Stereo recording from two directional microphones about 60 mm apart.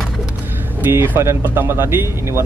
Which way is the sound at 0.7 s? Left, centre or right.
Right.